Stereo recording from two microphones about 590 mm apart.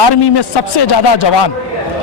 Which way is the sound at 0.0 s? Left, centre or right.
Left.